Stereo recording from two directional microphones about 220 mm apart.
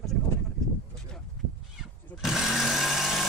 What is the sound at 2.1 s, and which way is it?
Vehicle, centre (ahead or behind).